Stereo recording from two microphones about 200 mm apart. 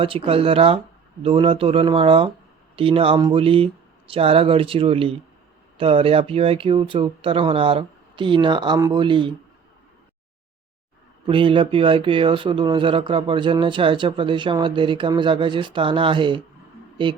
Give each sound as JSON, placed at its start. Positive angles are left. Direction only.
{"t": 0.0, "sound": "speech", "side_deg": -30}
{"t": 11.3, "sound": "speech", "side_deg": -25}